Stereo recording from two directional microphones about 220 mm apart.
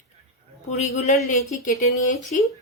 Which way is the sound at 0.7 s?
30° left (ahead or behind).